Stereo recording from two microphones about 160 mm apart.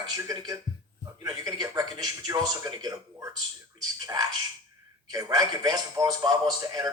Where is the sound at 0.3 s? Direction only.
25° right (ahead or behind).